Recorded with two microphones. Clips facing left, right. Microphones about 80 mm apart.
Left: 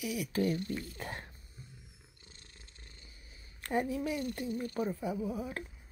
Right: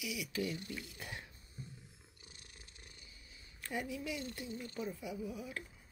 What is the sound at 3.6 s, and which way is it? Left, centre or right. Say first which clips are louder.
A woman's voice: left 8 dB; left.